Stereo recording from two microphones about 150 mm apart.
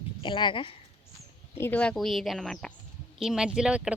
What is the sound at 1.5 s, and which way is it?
Speech, 15° left (ahead or behind).